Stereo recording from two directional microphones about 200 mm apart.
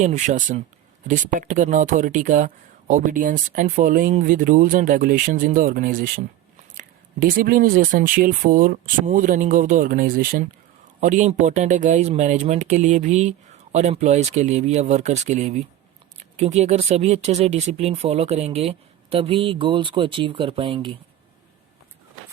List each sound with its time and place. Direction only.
0.0 s speech: 35° right (ahead or behind)